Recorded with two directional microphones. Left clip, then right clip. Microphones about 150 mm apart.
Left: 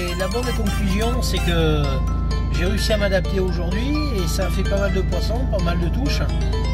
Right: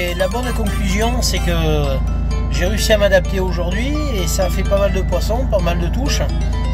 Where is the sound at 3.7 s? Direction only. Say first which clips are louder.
Right 2 dB; centre (ahead or behind).